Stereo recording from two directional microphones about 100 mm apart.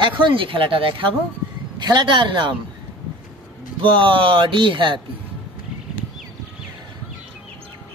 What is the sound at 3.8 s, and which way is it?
Speech, 55° right (ahead or behind).